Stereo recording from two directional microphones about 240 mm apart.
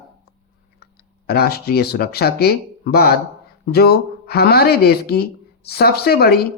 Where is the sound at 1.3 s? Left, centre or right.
Left.